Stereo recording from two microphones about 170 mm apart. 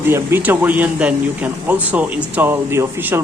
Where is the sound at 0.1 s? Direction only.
15° right (ahead or behind).